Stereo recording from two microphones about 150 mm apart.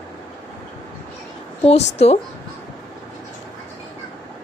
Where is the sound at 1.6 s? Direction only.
45° left (ahead or behind).